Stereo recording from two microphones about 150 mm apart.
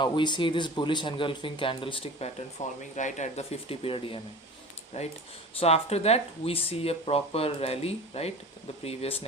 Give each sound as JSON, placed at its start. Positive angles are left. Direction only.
{"t": 0.0, "sound": "speech", "side_deg": 30}
{"t": 2.6, "sound": "speech", "side_deg": 55}
{"t": 4.9, "sound": "speech", "side_deg": 45}